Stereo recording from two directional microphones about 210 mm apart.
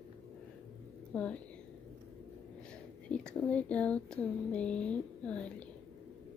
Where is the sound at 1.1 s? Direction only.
5° left (ahead or behind).